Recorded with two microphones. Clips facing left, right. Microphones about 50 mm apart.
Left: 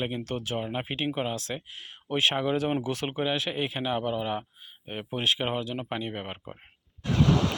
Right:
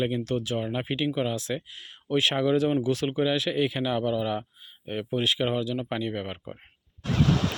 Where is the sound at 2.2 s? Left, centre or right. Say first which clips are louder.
Right 1 dB; centre.